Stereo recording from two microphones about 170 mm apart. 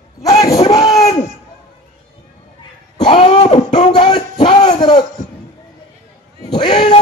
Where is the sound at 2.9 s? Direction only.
30° left (ahead or behind).